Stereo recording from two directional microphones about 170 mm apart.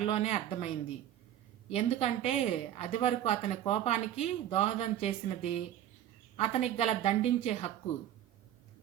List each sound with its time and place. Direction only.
0.0 s speech: 40° left (ahead or behind)
1.7 s speech: 40° left (ahead or behind)